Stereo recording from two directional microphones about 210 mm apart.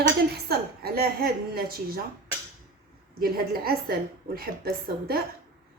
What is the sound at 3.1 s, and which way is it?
Speech, 45° right (ahead or behind).